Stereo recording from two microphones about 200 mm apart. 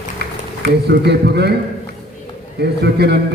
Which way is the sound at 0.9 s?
55° right (ahead or behind).